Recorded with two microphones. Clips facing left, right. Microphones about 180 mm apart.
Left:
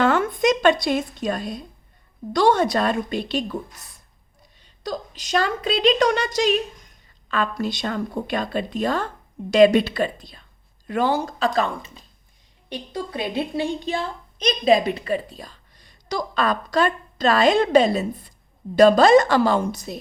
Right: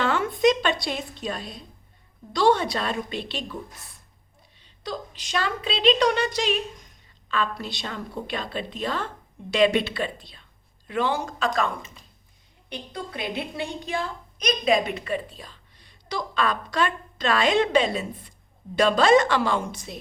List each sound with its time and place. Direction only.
0.0 s a woman's voice: 50° left (ahead or behind)
4.6 s a woman's voice: 45° left (ahead or behind)